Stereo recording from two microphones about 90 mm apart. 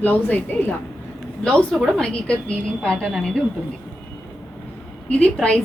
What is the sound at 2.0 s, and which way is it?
A woman's voice, 10° left (ahead or behind).